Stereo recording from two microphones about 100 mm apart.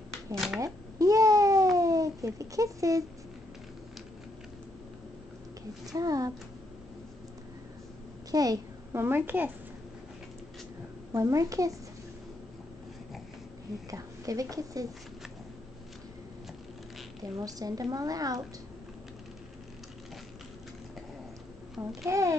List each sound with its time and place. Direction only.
0.3 s speech: centre (ahead or behind)
0.9 s cat: 35° right (ahead or behind)
1.8 s babbling: 35° right (ahead or behind)
5.9 s a woman's voice: 35° right (ahead or behind)
8.3 s a child's voice: 40° right (ahead or behind)
8.9 s a woman's voice: 20° right (ahead or behind)
11.1 s a woman's voice: 30° right (ahead or behind)
13.8 s a woman's voice: 35° right (ahead or behind)
17.2 s a woman's voice: 35° right (ahead or behind)
22.0 s a woman's voice: 30° right (ahead or behind)